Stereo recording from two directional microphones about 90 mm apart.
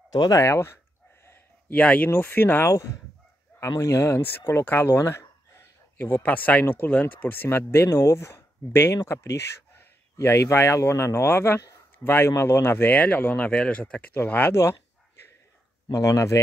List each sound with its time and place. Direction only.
0.1 s speech: 45° left (ahead or behind)
1.2 s a sound: 25° left (ahead or behind)
1.8 s speech: 15° left (ahead or behind)
2.7 s speech: 40° left (ahead or behind)
15.9 s speech: 35° left (ahead or behind)